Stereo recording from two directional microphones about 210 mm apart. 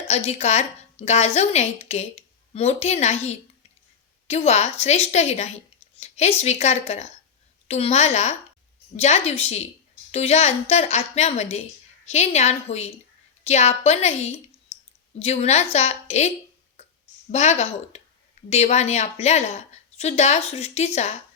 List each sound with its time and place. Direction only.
0.1 s a woman's voice: 30° left (ahead or behind)
16.8 s a sound: 30° left (ahead or behind)
17.3 s a woman's voice: 30° left (ahead or behind)